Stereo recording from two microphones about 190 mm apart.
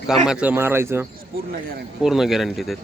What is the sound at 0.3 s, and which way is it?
Speech, 5° right (ahead or behind).